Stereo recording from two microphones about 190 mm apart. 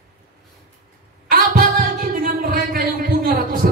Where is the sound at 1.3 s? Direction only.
50° right (ahead or behind).